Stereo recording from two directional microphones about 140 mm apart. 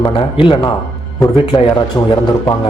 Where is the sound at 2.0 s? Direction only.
20° left (ahead or behind).